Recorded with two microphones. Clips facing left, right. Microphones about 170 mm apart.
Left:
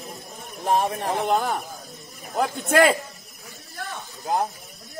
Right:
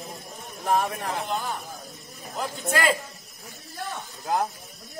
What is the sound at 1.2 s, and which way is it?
A man's voice, 60° left (ahead or behind).